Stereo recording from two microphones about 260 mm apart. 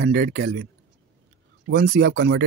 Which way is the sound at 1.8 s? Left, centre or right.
Right.